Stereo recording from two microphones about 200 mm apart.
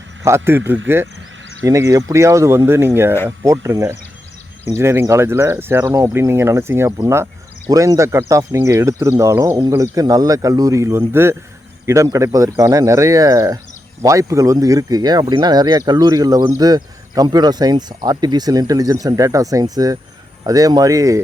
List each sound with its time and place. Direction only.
0.2 s speech: 15° right (ahead or behind)